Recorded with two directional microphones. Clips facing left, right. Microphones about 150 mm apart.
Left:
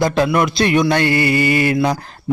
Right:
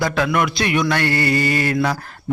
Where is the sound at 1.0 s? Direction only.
15° left (ahead or behind).